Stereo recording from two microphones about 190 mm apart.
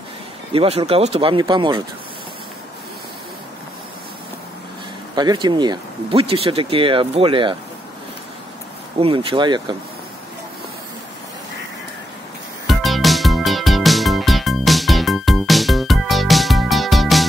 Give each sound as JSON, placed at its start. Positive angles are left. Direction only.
{"t": 0.5, "sound": "speech", "side_deg": -30}
{"t": 5.1, "sound": "speech", "side_deg": -20}
{"t": 9.0, "sound": "speech", "side_deg": -25}
{"t": 12.6, "sound": "music", "side_deg": 0}